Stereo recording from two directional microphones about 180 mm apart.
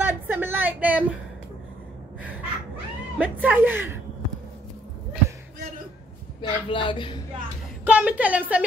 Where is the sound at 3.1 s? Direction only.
10° right (ahead or behind).